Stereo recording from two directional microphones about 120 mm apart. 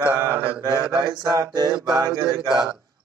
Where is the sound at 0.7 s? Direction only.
35° right (ahead or behind).